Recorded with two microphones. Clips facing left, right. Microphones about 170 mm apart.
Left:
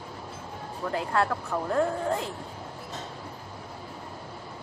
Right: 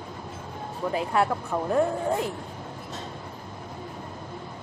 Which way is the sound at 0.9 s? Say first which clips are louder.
Right 2 dB; 15° right (ahead or behind).